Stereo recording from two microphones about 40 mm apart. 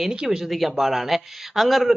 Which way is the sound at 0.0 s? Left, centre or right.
Centre.